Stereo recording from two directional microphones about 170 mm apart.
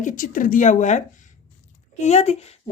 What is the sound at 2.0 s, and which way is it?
Speech, 40° left (ahead or behind).